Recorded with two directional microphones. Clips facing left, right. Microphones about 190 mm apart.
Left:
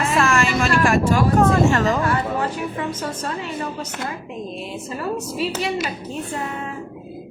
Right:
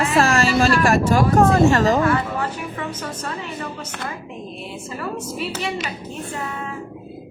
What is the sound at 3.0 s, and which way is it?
Speech, 35° left (ahead or behind).